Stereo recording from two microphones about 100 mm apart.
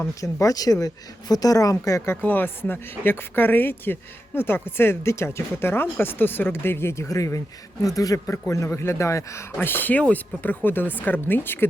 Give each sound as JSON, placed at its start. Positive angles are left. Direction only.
{"t": 0.2, "sound": "a man's voice", "side_deg": 35}